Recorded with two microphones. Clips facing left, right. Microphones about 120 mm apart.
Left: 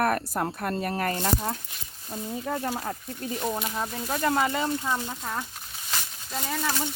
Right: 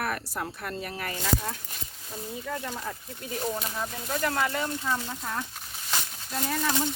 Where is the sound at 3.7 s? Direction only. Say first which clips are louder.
Left 2 dB; 15° left (ahead or behind).